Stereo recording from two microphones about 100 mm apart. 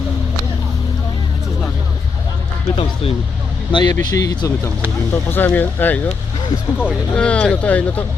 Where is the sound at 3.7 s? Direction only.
45° left (ahead or behind).